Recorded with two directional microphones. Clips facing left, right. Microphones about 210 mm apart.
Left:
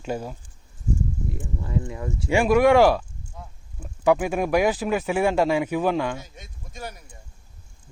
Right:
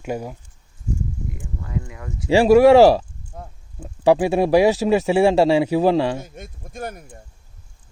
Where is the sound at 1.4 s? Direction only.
25° left (ahead or behind).